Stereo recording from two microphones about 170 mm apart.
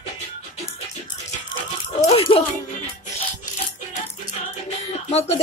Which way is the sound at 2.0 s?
35° left (ahead or behind).